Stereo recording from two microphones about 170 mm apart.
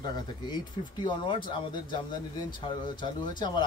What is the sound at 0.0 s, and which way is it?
Speech, 25° left (ahead or behind).